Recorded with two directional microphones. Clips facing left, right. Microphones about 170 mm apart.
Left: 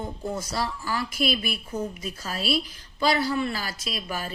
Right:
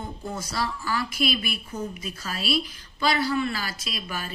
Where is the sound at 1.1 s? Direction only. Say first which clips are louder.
Even; 40° left (ahead or behind).